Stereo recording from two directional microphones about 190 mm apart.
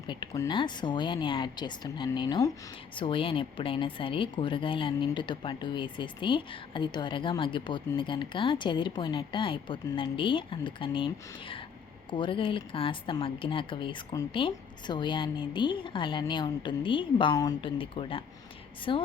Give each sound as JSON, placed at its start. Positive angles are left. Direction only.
{"t": 0.1, "sound": "speech", "side_deg": 25}